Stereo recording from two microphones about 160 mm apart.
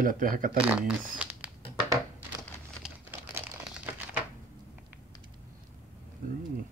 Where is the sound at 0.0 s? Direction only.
60° right (ahead or behind).